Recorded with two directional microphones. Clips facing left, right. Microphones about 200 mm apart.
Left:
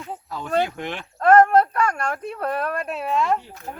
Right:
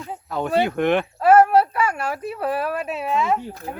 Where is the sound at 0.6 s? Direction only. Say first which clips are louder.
Right 11 dB; 60° right (ahead or behind).